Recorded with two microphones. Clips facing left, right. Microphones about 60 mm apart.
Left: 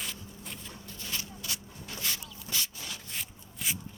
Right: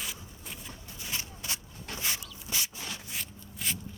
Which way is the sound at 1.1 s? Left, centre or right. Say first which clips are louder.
Right 1 dB; right.